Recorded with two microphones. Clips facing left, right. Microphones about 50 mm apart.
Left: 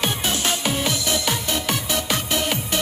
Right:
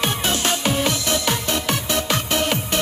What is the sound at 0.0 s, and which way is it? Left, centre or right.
Music, right.